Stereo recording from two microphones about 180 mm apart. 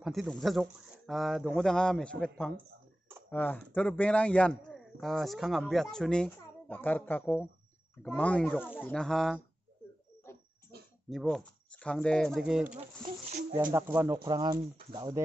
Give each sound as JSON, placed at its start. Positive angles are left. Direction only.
{"t": 0.0, "sound": "a man's voice", "side_deg": 0}
{"t": 10.7, "sound": "oink", "side_deg": -65}
{"t": 11.1, "sound": "speech", "side_deg": 0}
{"t": 13.7, "sound": "speech", "side_deg": -15}
{"t": 14.1, "sound": "speech", "side_deg": -25}